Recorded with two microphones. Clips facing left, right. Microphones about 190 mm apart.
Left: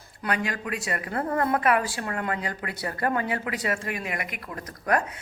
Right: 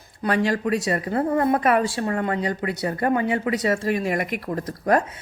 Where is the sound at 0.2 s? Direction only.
30° right (ahead or behind).